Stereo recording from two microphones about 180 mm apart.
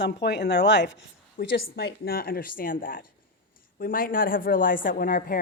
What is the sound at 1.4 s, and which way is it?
Speech, 65° left (ahead or behind).